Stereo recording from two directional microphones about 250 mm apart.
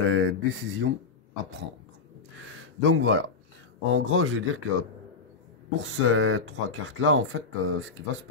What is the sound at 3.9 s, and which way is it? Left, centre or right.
Speech, right.